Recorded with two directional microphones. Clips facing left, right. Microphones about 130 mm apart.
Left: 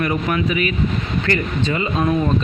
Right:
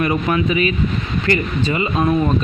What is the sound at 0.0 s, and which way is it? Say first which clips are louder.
Speech: right 2 dB; 20° right (ahead or behind).